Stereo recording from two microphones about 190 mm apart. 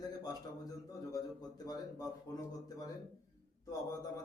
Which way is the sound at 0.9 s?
20° left (ahead or behind).